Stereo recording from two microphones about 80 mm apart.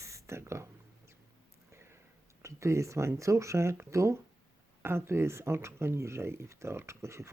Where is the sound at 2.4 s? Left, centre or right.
Right.